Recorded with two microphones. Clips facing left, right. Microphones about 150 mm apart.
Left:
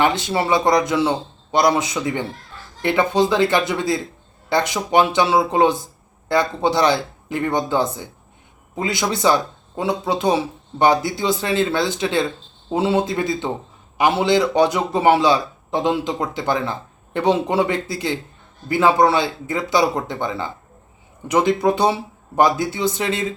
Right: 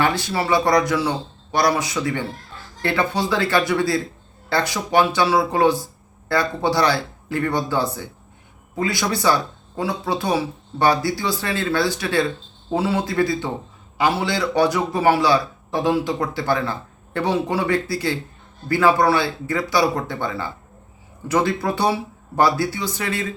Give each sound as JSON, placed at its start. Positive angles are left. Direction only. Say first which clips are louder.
{"t": 0.0, "sound": "speech", "louder": "left 2 dB", "side_deg": 20}